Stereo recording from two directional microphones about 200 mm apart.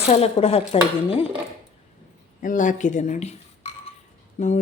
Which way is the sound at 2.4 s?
40° left (ahead or behind).